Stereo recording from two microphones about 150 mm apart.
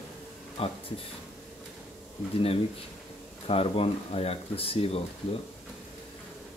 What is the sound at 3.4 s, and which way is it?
Speech, 40° left (ahead or behind).